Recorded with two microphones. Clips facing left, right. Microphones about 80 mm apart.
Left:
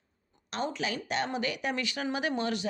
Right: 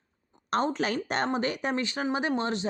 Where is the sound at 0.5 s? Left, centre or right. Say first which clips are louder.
Right 6 dB; right.